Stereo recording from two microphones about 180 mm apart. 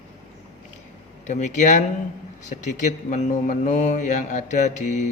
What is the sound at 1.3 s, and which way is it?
Speech, 40° left (ahead or behind).